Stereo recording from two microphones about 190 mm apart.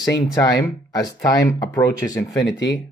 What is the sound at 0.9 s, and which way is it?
Speech, 20° left (ahead or behind).